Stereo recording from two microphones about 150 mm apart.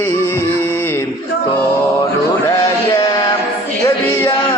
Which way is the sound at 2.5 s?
20° left (ahead or behind).